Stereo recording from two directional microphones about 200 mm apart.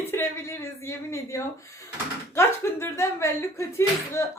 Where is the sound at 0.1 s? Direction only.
15° left (ahead or behind).